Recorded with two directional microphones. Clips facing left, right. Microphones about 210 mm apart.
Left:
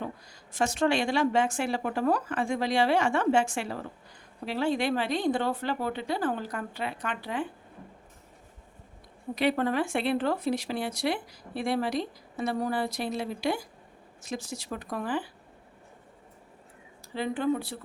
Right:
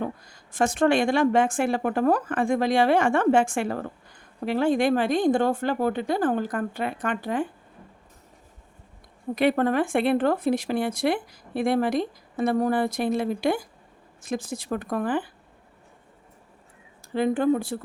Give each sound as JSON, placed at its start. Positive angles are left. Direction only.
{"t": 0.0, "sound": "speech", "side_deg": -50}
{"t": 9.3, "sound": "speech", "side_deg": -50}
{"t": 17.2, "sound": "speech", "side_deg": -50}